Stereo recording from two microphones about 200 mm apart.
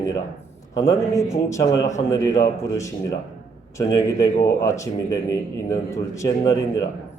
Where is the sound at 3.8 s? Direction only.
15° left (ahead or behind).